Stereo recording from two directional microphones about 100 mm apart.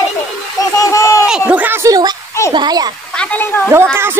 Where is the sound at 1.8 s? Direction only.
40° right (ahead or behind).